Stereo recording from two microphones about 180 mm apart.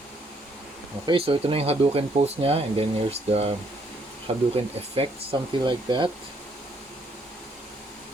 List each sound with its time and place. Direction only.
1.0 s speech: 30° right (ahead or behind)
4.5 s speech: 30° right (ahead or behind)